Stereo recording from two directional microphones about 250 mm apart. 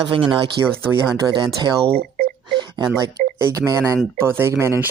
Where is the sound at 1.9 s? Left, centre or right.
Right.